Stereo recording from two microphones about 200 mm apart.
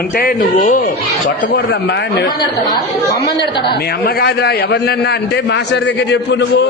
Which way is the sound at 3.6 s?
55° left (ahead or behind).